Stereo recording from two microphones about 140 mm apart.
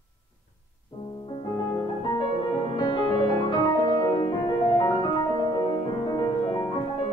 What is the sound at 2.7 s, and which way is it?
Music, 35° left (ahead or behind).